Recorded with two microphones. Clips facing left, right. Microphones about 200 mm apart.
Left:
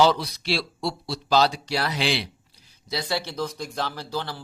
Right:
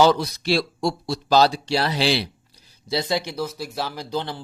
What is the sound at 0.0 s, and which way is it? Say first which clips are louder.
Speech: right 3 dB; 45° right (ahead or behind).